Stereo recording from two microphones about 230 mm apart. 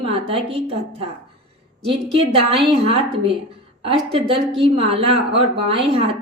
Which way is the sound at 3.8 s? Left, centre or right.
Right.